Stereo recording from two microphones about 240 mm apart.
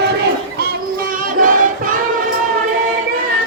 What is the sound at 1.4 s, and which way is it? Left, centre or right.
Music, right.